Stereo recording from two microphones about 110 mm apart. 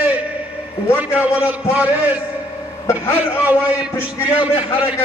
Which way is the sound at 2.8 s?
20° left (ahead or behind).